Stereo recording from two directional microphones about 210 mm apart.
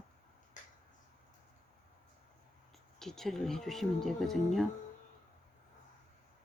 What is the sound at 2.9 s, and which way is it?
Speech, centre (ahead or behind).